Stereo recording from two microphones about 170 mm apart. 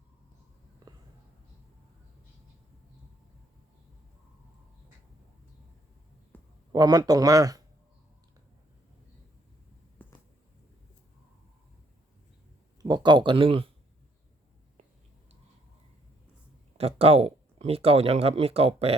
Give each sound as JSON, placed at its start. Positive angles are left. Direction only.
{"t": 0.8, "sound": "whispering", "side_deg": -20}
{"t": 6.3, "sound": "a sound", "side_deg": 10}
{"t": 6.7, "sound": "speech", "side_deg": -25}
{"t": 10.0, "sound": "a sound", "side_deg": 10}
{"t": 12.8, "sound": "speech", "side_deg": -25}
{"t": 16.7, "sound": "speech", "side_deg": -35}